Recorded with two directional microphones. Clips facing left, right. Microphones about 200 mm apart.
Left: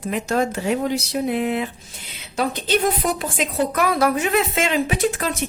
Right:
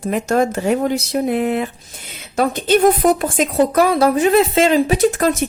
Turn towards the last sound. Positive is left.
turn(degrees=-40)  # may be behind; listen again after turning